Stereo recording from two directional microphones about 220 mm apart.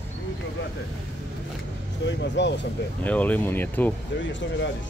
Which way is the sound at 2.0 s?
55° left (ahead or behind).